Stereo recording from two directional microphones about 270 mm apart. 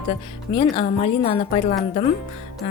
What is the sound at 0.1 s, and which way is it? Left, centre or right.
Speech, centre.